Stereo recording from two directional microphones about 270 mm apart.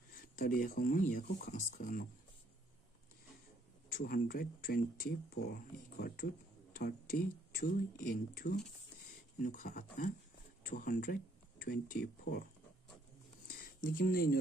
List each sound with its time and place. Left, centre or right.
0.2 s speech: left
4.0 s speech: left
13.8 s speech: left